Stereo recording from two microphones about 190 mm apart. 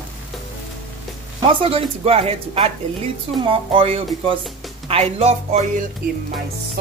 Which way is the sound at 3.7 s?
30° right (ahead or behind).